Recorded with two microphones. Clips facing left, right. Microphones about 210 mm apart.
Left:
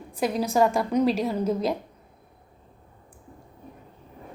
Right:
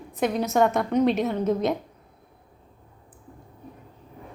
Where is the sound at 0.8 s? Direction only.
5° left (ahead or behind).